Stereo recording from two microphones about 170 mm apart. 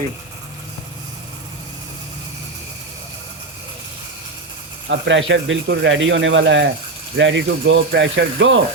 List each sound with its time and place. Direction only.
4.9 s speech: 90° right